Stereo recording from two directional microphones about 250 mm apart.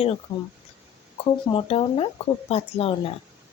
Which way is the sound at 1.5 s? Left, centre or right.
Left.